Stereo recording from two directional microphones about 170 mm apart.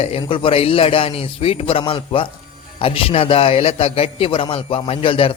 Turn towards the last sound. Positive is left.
turn(degrees=30)  # may be behind; listen again after turning